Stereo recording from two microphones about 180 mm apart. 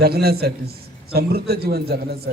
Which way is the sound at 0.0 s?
60° right (ahead or behind).